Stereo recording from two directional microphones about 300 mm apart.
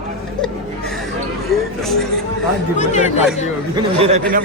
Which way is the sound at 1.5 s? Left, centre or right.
Centre.